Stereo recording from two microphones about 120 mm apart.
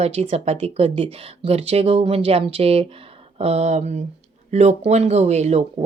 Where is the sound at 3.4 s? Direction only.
65° right (ahead or behind).